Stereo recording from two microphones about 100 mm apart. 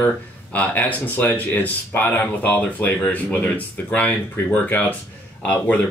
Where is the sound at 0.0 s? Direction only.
15° left (ahead or behind).